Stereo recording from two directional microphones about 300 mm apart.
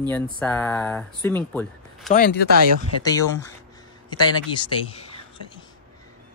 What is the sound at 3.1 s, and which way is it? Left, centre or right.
Speech, centre.